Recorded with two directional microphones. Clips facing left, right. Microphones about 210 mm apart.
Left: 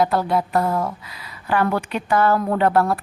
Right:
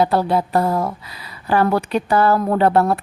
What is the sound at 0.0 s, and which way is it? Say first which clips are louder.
A woman's voice: right 2 dB; 30° right (ahead or behind).